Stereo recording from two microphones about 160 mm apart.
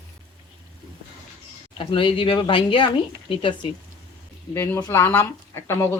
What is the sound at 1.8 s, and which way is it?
Speech, 30° left (ahead or behind).